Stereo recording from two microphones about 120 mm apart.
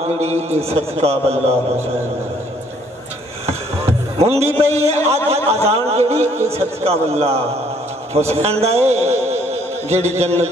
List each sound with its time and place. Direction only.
0.0 s a man's voice: 65° right (ahead or behind)
4.2 s a man's voice: 60° right (ahead or behind)